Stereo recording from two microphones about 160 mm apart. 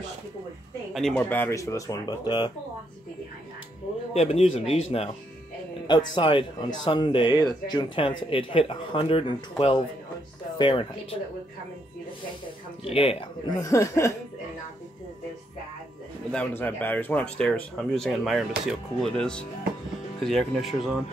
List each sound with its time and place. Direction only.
0.9 s speech: 5° left (ahead or behind); by 2.5 s 30° left (ahead or behind)
4.1 s speech: 40° left (ahead or behind)
5.9 s speech: 30° left (ahead or behind)
12.8 s speech: 35° left (ahead or behind)
13.5 s speech: 20° left (ahead or behind)
16.3 s speech: 10° left (ahead or behind)